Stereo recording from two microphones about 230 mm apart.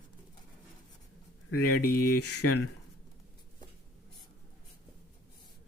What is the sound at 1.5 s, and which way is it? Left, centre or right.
Speech, left.